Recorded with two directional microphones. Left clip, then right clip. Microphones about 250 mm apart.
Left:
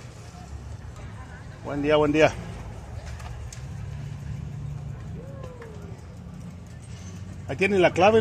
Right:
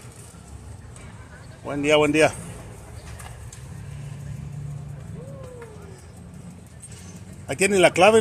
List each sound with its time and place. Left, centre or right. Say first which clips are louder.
1.7 s speech: right 2 dB; centre
7.4 s speech: right 3 dB; centre